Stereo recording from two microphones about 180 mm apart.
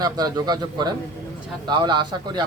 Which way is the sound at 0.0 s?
20° right (ahead or behind).